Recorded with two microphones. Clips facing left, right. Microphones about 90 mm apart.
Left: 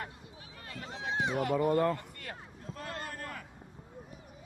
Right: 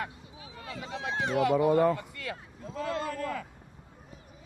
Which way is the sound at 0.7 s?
90° right.